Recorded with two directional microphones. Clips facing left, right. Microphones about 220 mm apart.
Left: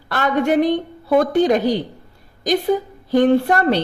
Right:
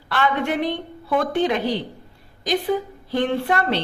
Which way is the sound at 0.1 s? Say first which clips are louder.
Left 5 dB; 45° left (ahead or behind).